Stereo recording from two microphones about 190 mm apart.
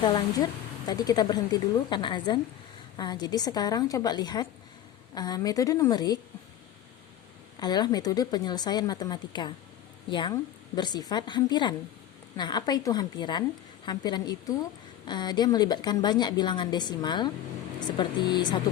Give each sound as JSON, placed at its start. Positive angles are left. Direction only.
{"t": 0.0, "sound": "a woman's voice", "side_deg": 25}
{"t": 7.6, "sound": "a woman's voice", "side_deg": 20}